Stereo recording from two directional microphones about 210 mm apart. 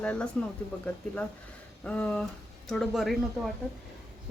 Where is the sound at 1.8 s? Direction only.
5° left (ahead or behind).